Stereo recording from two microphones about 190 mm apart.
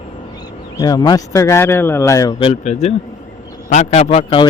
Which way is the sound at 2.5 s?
35° left (ahead or behind).